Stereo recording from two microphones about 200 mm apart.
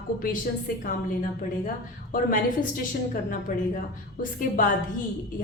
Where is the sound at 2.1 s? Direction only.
45° left (ahead or behind).